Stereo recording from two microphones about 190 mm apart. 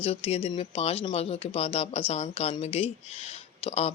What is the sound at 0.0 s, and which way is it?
Speech, 30° left (ahead or behind).